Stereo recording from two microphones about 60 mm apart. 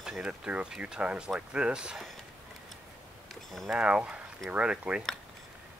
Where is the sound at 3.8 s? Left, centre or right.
Centre.